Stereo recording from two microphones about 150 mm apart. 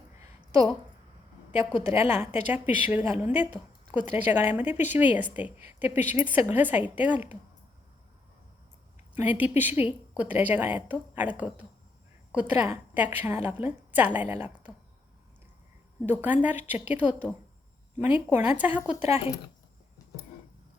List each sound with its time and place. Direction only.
1.5 s a woman's voice: 20° right (ahead or behind)
9.1 s a woman's voice: 10° right (ahead or behind)
16.0 s a woman's voice: 10° right (ahead or behind)